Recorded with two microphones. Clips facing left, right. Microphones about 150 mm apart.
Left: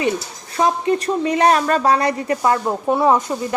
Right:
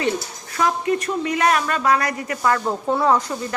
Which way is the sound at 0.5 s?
30° left (ahead or behind).